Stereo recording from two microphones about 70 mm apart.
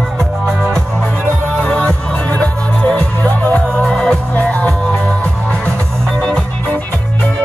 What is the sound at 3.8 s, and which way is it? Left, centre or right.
Music, centre.